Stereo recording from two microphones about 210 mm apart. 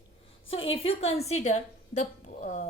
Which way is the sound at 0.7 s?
30° left (ahead or behind).